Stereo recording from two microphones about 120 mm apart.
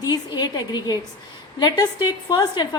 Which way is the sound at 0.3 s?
35° left (ahead or behind).